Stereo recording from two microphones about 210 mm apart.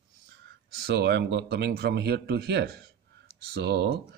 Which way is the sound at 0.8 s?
50° right (ahead or behind).